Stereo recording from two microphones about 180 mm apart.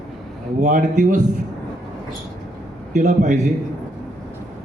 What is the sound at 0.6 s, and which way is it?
Speech, 45° right (ahead or behind).